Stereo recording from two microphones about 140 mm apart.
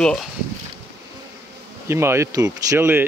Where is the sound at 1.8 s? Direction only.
20° right (ahead or behind).